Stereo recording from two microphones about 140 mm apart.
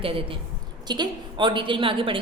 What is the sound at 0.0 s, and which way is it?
A woman's voice, 40° right (ahead or behind).